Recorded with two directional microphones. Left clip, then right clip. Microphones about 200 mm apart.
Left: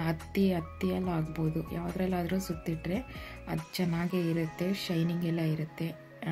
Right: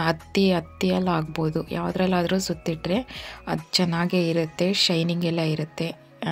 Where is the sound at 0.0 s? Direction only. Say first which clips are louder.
Right 9 dB; 30° right (ahead or behind).